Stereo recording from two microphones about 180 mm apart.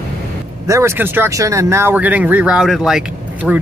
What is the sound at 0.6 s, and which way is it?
Speech, 15° right (ahead or behind).